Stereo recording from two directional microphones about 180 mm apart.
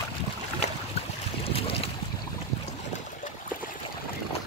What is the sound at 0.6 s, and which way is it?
Boat, 40° left (ahead or behind).